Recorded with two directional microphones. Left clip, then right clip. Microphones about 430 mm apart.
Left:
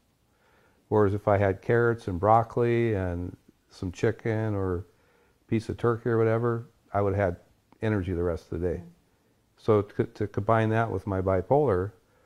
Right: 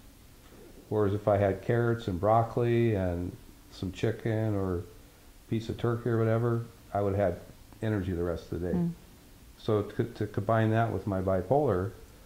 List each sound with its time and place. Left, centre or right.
0.8 s speech: left